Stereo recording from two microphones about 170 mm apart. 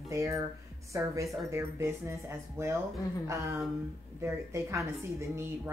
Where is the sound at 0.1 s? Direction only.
15° right (ahead or behind).